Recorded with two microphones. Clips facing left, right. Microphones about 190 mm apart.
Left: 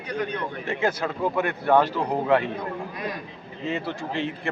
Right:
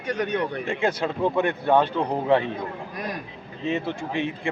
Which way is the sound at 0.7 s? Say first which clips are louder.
Left 2 dB; 25° right (ahead or behind).